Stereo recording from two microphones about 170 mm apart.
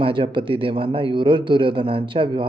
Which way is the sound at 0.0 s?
30° right (ahead or behind).